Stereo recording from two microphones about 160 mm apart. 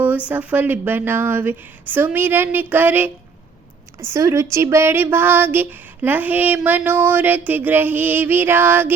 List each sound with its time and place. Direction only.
0.3 s female singing: 10° right (ahead or behind)
4.0 s a woman's voice: 20° right (ahead or behind)
4.5 s female singing: 15° right (ahead or behind)